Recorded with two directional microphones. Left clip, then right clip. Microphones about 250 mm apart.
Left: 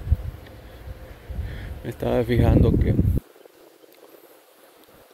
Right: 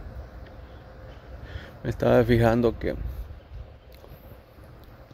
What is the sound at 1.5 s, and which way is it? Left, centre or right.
Speech, centre.